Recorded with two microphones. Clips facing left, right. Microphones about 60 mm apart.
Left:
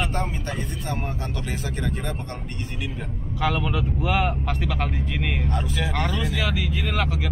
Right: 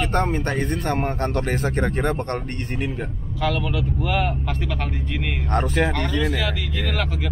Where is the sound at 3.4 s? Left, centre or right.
Centre.